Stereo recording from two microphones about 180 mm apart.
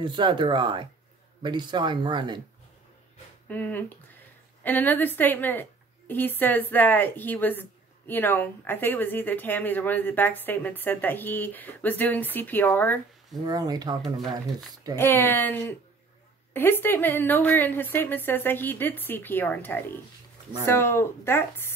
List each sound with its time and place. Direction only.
0.0 s speech: 25° right (ahead or behind)
3.4 s speech: 10° left (ahead or behind)
13.5 s speech: 20° right (ahead or behind)
15.0 s speech: 10° left (ahead or behind)